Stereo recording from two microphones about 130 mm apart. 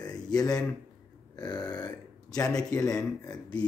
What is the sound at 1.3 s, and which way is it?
Burping, 30° left (ahead or behind).